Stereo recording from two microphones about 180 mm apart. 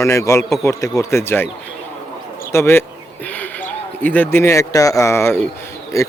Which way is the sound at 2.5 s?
15° left (ahead or behind).